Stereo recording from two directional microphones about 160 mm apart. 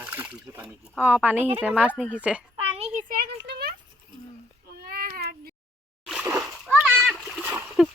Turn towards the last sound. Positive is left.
turn(degrees=-10)  # may be behind; listen again after turning